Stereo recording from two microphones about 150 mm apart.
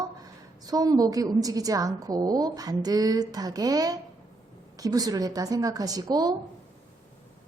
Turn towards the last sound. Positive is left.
turn(degrees=-25)  # may be behind; listen again after turning